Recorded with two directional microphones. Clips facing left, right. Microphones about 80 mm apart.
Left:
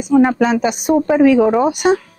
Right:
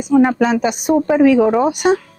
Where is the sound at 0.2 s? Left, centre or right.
Left.